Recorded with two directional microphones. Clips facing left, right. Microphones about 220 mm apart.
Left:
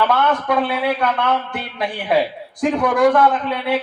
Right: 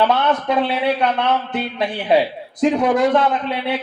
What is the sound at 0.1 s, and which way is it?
A man's voice, 20° right (ahead or behind).